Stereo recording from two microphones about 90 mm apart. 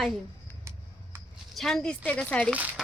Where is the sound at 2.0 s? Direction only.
15° left (ahead or behind).